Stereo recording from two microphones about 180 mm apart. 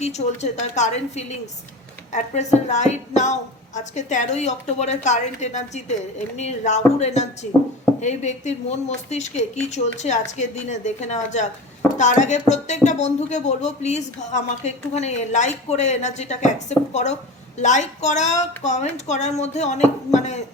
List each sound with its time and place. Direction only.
0.0 s speech: 40° left (ahead or behind)